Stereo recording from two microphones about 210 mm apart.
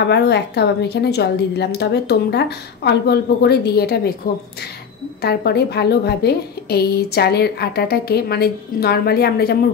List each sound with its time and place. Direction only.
0.0 s a woman's voice: 55° left (ahead or behind)
5.2 s a woman's voice: 50° left (ahead or behind)